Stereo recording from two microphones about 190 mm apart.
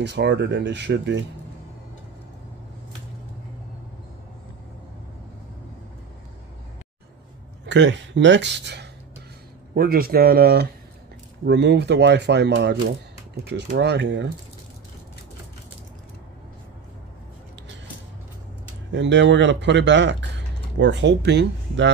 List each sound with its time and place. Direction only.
0.0 s speech: 65° right (ahead or behind)
7.6 s speech: 70° right (ahead or behind)
9.8 s speech: 50° right (ahead or behind)
11.4 s speech: 65° right (ahead or behind)
18.9 s speech: 70° right (ahead or behind)